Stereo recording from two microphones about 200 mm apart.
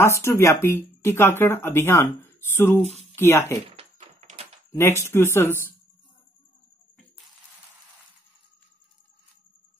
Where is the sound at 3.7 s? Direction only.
30° right (ahead or behind).